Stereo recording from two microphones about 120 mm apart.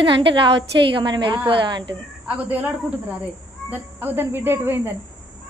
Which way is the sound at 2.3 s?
15° right (ahead or behind).